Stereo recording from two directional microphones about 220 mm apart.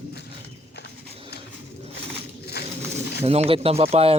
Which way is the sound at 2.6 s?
45° left (ahead or behind).